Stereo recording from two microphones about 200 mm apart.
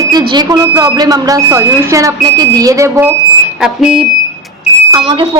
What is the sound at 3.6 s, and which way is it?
Speech, 5° right (ahead or behind).